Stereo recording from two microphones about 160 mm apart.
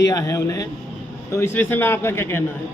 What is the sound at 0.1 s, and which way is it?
A man's voice, 20° left (ahead or behind).